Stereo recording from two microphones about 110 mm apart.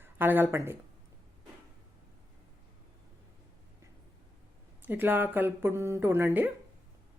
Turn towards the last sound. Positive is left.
turn(degrees=-20)  # may be behind; listen again after turning